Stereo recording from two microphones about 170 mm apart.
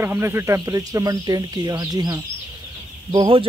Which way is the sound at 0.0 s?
15° right (ahead or behind).